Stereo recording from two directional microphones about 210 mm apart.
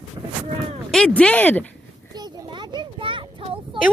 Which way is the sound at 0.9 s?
5° left (ahead or behind).